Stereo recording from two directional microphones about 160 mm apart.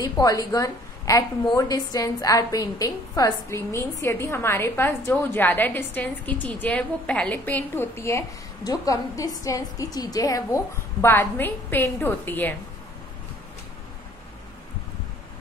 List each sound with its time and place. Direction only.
0.0 s a woman's voice: 20° left (ahead or behind)